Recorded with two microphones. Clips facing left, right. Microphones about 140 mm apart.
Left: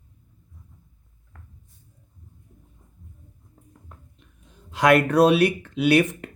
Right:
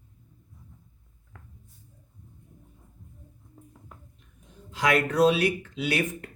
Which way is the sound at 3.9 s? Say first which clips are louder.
Left 2 dB; 5° right (ahead or behind).